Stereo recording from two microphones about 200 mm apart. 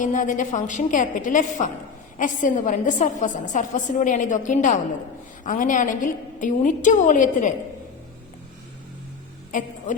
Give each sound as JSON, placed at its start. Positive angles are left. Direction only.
{"t": 0.0, "sound": "a woman's voice", "side_deg": 40}
{"t": 9.5, "sound": "a woman's voice", "side_deg": 40}